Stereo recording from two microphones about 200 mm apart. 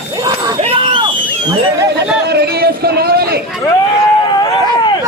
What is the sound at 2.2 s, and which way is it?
Speech, 55° right (ahead or behind).